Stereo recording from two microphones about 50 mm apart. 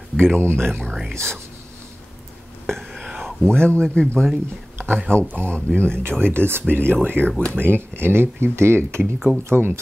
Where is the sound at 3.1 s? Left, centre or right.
Centre.